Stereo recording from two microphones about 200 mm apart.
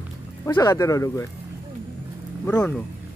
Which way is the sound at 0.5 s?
20° left (ahead or behind).